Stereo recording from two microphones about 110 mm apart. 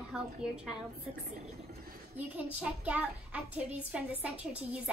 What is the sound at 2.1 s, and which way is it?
A child's voice, 15° right (ahead or behind).